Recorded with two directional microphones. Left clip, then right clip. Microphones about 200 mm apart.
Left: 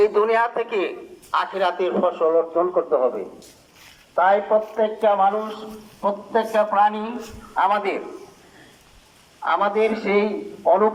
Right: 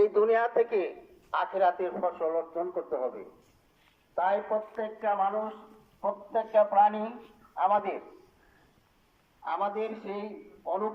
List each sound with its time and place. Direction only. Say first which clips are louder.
0.0 s a man's voice: left 6 dB; 45° right (ahead or behind); by 3.1 s 20° right (ahead or behind)
4.1 s a man's voice: left 11 dB; 15° right (ahead or behind)
9.4 s a man's voice: left 12 dB; 10° right (ahead or behind)